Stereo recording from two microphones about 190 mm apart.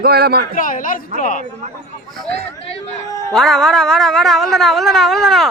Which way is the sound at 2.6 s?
30° left (ahead or behind).